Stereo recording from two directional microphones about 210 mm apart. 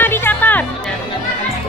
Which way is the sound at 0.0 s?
10° left (ahead or behind).